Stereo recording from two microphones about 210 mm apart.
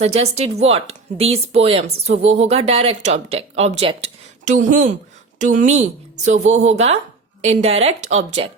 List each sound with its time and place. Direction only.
0.0 s a woman's voice: 30° right (ahead or behind)